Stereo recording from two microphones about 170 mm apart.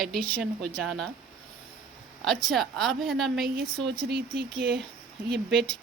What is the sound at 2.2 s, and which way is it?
A woman's voice, centre (ahead or behind).